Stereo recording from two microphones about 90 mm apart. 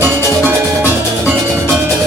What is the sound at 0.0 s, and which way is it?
Music, 15° right (ahead or behind).